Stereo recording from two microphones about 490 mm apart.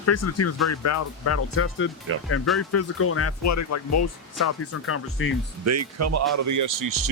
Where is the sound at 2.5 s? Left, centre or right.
Left.